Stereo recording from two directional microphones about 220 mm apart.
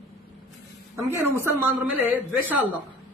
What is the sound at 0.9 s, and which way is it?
A man's voice, 10° right (ahead or behind).